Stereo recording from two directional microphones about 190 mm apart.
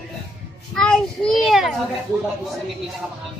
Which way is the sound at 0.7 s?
5° left (ahead or behind).